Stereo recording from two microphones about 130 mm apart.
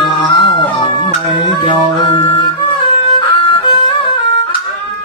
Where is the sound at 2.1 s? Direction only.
35° left (ahead or behind).